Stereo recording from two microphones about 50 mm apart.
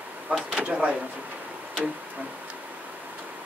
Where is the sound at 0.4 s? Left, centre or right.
Right.